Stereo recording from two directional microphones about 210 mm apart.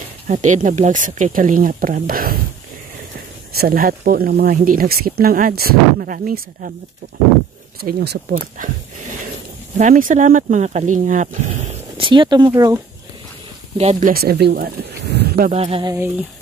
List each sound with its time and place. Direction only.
0.3 s speech: 35° right (ahead or behind)
3.5 s speech: 45° right (ahead or behind)
7.8 s speech: 50° right (ahead or behind)
12.0 s speech: 25° right (ahead or behind)
13.7 s speech: 35° right (ahead or behind)
15.5 s speech: 30° right (ahead or behind)
15.9 s speech: 10° right (ahead or behind)